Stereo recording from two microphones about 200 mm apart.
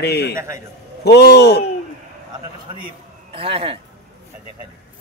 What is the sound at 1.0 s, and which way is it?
Speech, 55° left (ahead or behind).